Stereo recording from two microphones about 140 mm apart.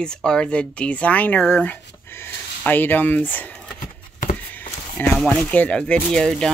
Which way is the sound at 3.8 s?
70° left (ahead or behind).